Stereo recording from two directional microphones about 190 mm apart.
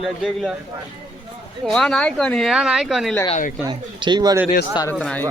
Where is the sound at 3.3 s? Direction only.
45° left (ahead or behind).